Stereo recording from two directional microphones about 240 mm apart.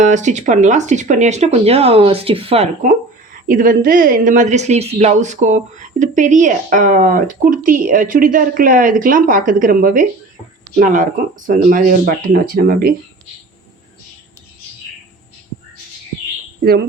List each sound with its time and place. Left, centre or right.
0.0 s speech: right
3.5 s speech: right